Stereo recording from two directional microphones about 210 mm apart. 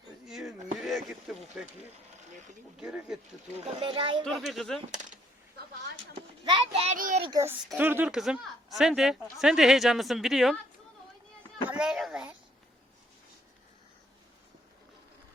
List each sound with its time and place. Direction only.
0.3 s a sound: centre (ahead or behind)
2.7 s a woman's voice: 5° right (ahead or behind)
3.8 s a child's voice: 25° right (ahead or behind)
4.3 s a woman's voice: centre (ahead or behind)
4.9 s speech: 35° right (ahead or behind)
6.4 s a child's voice: 25° right (ahead or behind)
6.9 s a child's voice: 40° right (ahead or behind)
7.3 s a woman's voice: 15° right (ahead or behind)
11.6 s a child's voice: 5° right (ahead or behind)